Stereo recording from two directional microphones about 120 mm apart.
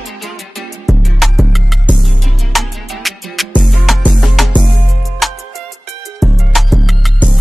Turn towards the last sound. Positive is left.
turn(degrees=0)  # may be behind; listen again after turning